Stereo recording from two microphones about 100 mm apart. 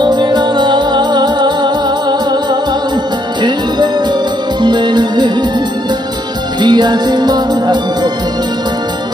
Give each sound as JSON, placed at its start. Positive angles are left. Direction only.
{"t": 0.0, "sound": "music", "side_deg": -50}
{"t": 3.4, "sound": "music", "side_deg": -50}
{"t": 6.6, "sound": "music", "side_deg": -45}